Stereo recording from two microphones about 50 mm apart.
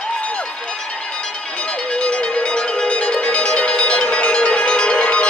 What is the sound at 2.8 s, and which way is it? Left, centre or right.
Music, left.